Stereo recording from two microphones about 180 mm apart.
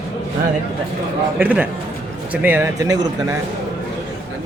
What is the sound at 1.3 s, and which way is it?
Speech, 10° right (ahead or behind).